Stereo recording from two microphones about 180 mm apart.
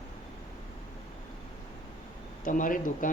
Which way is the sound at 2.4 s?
50° left (ahead or behind).